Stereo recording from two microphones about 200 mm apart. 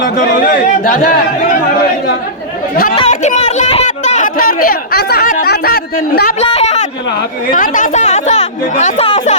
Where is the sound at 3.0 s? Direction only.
35° left (ahead or behind); by 6.3 s 50° left (ahead or behind).